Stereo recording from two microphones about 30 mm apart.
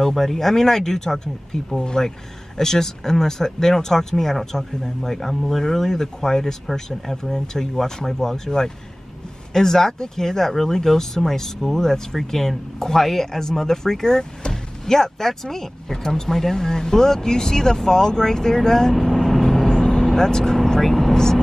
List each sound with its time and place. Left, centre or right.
0.0 s speech: centre
18.9 s vehicle: centre
19.7 s vehicle: centre
20.2 s speech: centre